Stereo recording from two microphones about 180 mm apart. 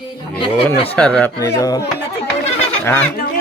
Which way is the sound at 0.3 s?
30° left (ahead or behind).